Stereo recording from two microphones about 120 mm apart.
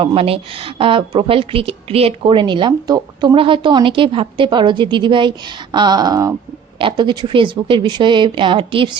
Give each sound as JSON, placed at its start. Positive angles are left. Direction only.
{"t": 0.0, "sound": "speech", "side_deg": -50}
{"t": 3.3, "sound": "a woman's voice", "side_deg": -45}
{"t": 6.7, "sound": "speech", "side_deg": -40}